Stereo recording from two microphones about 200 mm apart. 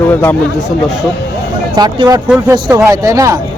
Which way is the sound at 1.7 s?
20° right (ahead or behind).